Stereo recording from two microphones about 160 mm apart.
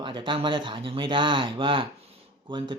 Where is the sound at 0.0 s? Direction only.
30° right (ahead or behind).